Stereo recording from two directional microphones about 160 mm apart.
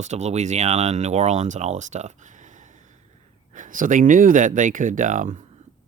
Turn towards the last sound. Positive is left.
turn(degrees=-55)  # may be behind; listen again after turning